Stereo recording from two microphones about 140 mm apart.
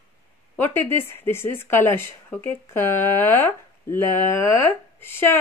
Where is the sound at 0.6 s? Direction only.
15° left (ahead or behind).